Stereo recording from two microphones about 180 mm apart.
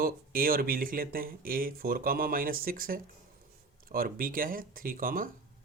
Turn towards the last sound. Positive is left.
turn(degrees=-50)  # may be behind; listen again after turning